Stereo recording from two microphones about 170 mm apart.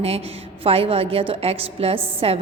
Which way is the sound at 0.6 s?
35° right (ahead or behind).